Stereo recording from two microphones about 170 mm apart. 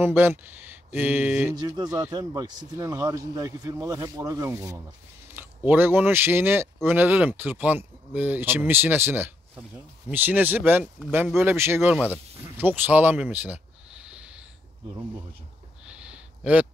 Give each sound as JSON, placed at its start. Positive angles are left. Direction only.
{"t": 0.0, "sound": "speech", "side_deg": -15}
{"t": 1.5, "sound": "speech", "side_deg": -20}
{"t": 15.8, "sound": "a sound", "side_deg": -5}